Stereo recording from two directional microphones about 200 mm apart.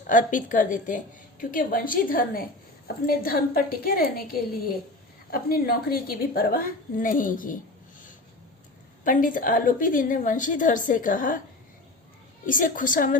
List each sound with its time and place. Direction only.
0.1 s a woman's voice: 40° left (ahead or behind)
5.3 s a woman's voice: 50° left (ahead or behind)
9.0 s a woman's voice: 45° left (ahead or behind)
12.5 s a woman's voice: 45° left (ahead or behind)